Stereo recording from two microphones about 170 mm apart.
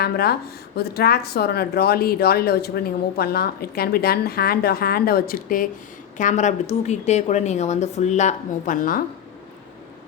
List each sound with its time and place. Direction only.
0.0 s a woman's voice: 65° left (ahead or behind)